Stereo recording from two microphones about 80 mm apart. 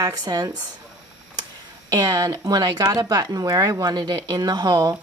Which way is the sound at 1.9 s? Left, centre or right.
Right.